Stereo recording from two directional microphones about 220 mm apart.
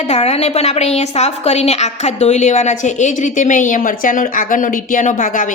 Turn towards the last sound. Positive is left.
turn(degrees=35)  # may be behind; listen again after turning